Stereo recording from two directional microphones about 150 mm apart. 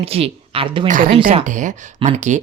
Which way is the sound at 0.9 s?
65° right (ahead or behind).